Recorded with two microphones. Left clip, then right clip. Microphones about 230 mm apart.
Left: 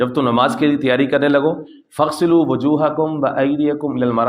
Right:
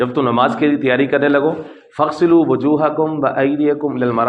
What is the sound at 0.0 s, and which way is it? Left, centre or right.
A man's voice, left.